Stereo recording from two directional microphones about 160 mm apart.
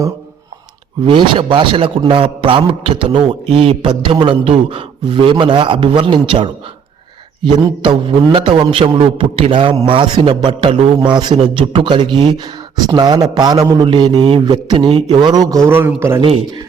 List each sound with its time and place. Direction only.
1.0 s a man's voice: 30° right (ahead or behind); by 16.2 s 15° right (ahead or behind)